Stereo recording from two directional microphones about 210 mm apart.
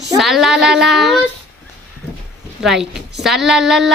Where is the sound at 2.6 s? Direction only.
Centre (ahead or behind).